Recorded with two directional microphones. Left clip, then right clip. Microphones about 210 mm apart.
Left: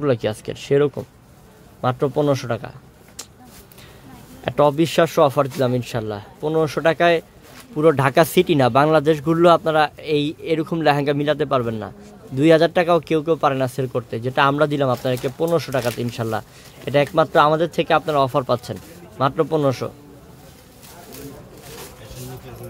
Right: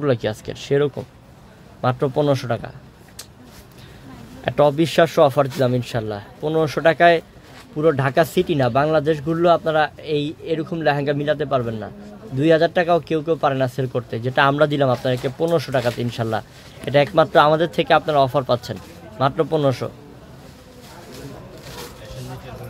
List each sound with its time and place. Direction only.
0.0 s speech: 10° left (ahead or behind)
4.5 s speech: 10° left (ahead or behind)